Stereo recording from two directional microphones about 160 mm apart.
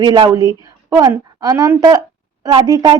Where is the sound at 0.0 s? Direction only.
25° right (ahead or behind).